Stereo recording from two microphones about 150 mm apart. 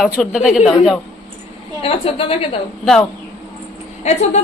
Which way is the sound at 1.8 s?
40° left (ahead or behind).